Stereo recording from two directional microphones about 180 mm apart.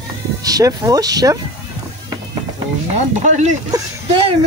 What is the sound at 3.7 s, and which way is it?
Speech, 20° right (ahead or behind).